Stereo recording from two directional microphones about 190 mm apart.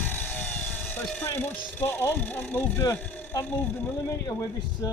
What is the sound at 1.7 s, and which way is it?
Speech, 10° left (ahead or behind).